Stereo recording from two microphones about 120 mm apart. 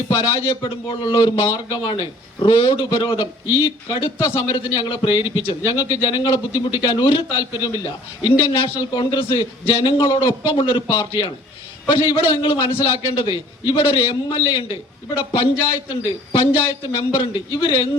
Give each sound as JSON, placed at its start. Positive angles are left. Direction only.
{"t": 0.2, "sound": "a man's voice", "side_deg": 45}